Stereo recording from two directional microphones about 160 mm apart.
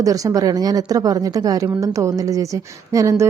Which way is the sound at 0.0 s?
20° right (ahead or behind).